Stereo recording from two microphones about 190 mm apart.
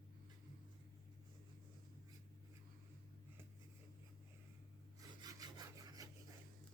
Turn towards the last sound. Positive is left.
turn(degrees=-20)  # may be behind; listen again after turning